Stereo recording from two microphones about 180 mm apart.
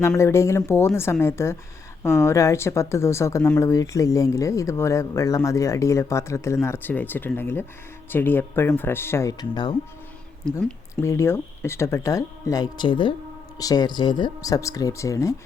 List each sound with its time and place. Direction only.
0.2 s speech: 15° left (ahead or behind)
10.6 s speech: 5° left (ahead or behind)
11.0 s speech: 15° left (ahead or behind)